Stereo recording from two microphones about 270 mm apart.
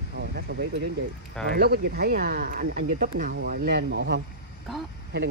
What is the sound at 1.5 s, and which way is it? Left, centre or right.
Speech, right.